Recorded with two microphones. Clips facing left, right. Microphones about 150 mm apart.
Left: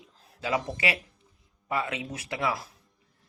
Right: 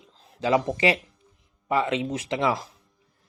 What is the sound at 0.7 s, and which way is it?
Speech, 15° right (ahead or behind).